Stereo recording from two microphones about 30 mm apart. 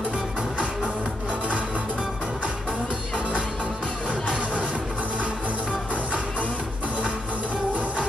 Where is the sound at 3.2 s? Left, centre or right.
Right.